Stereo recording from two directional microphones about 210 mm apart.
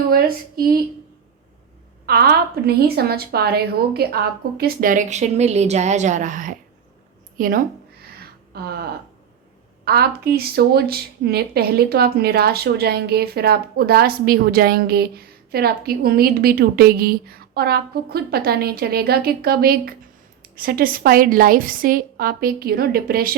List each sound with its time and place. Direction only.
0.1 s speech: 45° right (ahead or behind)
2.0 s speech: 45° right (ahead or behind)
8.0 s a sound: 45° right (ahead or behind)
9.8 s speech: 50° right (ahead or behind)